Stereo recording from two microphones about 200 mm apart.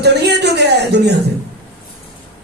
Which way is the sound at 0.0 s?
55° right (ahead or behind).